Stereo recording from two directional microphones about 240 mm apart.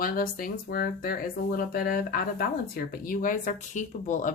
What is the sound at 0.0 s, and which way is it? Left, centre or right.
Speech, left.